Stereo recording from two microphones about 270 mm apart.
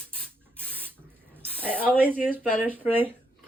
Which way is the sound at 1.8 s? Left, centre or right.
Centre.